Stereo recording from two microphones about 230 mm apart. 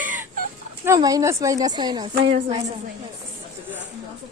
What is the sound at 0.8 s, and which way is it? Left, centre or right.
A woman's voice, centre.